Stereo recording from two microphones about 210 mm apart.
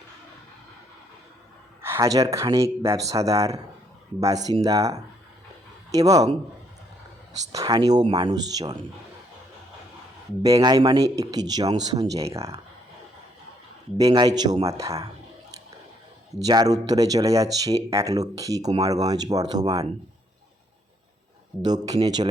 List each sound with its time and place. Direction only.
1.8 s speech: 15° right (ahead or behind)
7.5 s speech: 20° right (ahead or behind)
10.4 s speech: 20° right (ahead or behind)
14.1 s speech: 20° right (ahead or behind)
16.4 s speech: 20° right (ahead or behind)
21.6 s speech: 20° right (ahead or behind)